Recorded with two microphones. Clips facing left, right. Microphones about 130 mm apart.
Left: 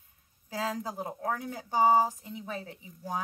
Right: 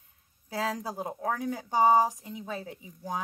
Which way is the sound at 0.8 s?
15° right (ahead or behind).